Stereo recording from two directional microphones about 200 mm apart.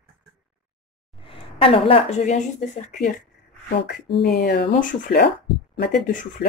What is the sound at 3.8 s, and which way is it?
Speech, 60° left (ahead or behind).